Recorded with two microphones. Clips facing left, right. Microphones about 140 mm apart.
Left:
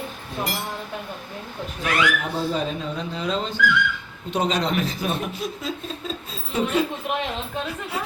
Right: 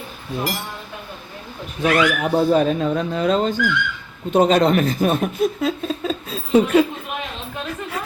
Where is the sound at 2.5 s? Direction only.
55° right (ahead or behind).